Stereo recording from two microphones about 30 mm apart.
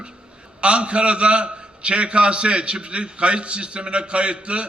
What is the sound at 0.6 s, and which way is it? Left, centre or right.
A man's voice, right.